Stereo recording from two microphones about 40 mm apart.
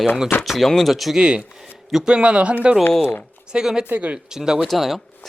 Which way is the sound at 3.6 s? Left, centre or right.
Centre.